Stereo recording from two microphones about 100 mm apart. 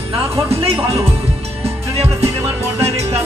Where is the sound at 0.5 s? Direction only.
80° right.